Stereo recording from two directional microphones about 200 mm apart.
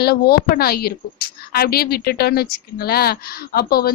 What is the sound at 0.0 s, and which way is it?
A woman's voice, 50° left (ahead or behind).